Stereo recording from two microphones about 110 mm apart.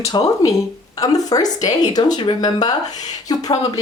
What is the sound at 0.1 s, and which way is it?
Speech, 35° left (ahead or behind).